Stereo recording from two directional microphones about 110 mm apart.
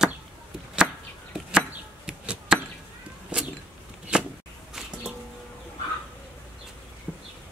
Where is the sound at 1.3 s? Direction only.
5° right (ahead or behind).